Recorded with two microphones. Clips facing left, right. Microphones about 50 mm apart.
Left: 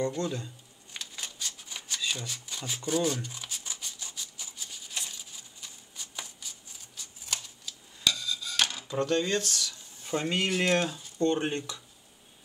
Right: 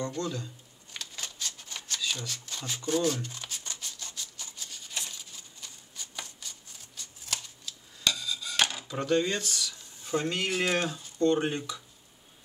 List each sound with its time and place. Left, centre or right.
0.1 s speech: centre
0.9 s a sound: centre
8.0 s rub: centre
8.9 s speech: centre
10.0 s speech: centre
10.5 s speech: centre